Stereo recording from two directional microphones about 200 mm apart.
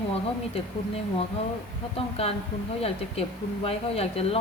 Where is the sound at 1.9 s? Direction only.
30° left (ahead or behind).